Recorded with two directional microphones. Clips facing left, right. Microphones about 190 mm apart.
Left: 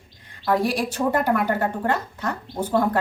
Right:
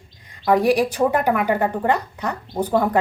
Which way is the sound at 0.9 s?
10° right (ahead or behind).